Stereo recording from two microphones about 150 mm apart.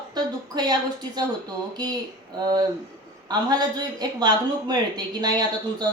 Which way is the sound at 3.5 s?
25° right (ahead or behind).